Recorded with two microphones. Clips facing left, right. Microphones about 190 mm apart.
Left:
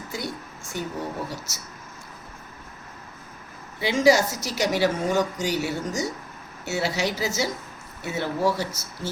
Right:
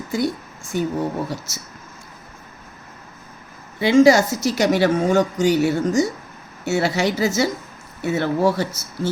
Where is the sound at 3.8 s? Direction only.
55° right (ahead or behind).